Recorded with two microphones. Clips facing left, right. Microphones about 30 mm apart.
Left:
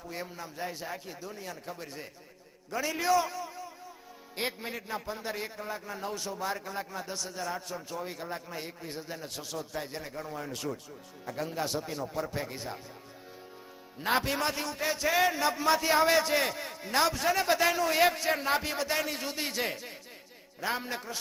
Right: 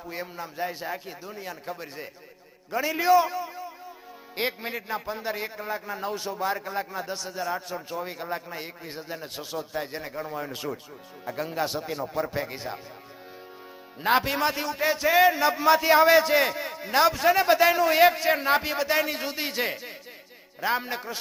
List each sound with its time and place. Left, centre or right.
0.0 s a man's voice: right
14.0 s a man's voice: centre